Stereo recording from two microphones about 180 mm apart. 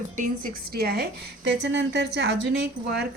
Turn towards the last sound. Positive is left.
turn(degrees=-70)  # may be behind; listen again after turning